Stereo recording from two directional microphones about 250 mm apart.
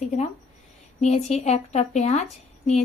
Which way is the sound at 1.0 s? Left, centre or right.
Left.